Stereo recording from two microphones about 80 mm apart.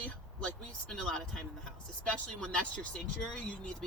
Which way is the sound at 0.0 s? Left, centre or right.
Centre.